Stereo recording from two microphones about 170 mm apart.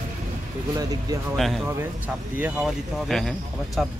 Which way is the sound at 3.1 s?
5° left (ahead or behind).